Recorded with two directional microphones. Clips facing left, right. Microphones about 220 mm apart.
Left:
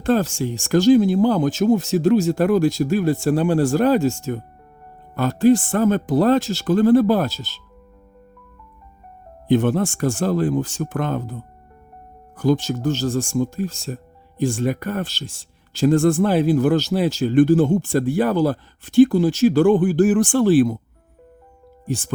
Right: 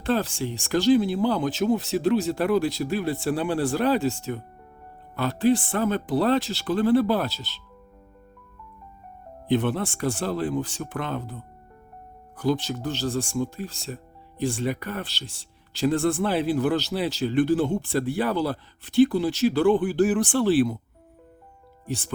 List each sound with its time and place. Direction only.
0.0 s speech: 45° left (ahead or behind)
9.5 s speech: 45° left (ahead or behind)
12.4 s speech: 45° left (ahead or behind)
21.8 s speech: 45° left (ahead or behind)